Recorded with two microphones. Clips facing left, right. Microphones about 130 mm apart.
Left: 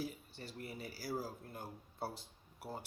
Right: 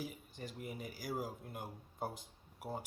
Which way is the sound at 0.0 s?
10° right (ahead or behind).